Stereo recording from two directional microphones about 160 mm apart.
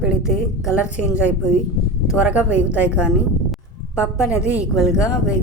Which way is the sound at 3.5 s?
10° right (ahead or behind).